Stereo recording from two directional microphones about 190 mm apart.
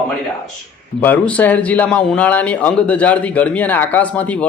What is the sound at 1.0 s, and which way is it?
A man's voice, 10° left (ahead or behind).